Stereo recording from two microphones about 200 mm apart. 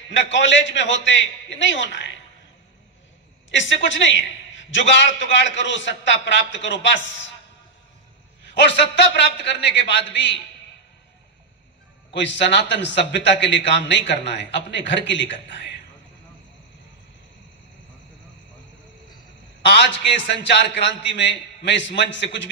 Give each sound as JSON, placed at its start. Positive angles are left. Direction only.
{"t": 0.1, "sound": "a man's voice", "side_deg": 65}
{"t": 3.4, "sound": "a man's voice", "side_deg": 65}
{"t": 8.5, "sound": "a man's voice", "side_deg": 60}
{"t": 12.1, "sound": "a man's voice", "side_deg": 60}
{"t": 19.6, "sound": "a man's voice", "side_deg": 60}